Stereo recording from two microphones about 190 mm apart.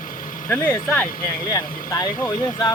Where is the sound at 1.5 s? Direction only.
20° left (ahead or behind).